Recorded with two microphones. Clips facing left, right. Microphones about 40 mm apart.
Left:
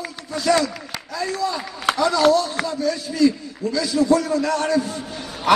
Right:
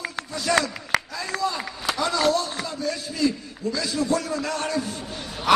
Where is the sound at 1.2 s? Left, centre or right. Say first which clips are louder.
Left 2 dB; right.